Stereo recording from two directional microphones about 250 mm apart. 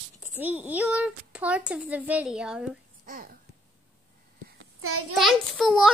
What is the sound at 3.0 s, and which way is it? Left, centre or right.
Speech, right.